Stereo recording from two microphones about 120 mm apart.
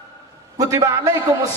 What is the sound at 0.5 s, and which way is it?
Mantra, 30° right (ahead or behind).